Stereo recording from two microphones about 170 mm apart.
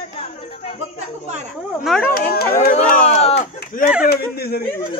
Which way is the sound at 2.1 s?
65° left (ahead or behind).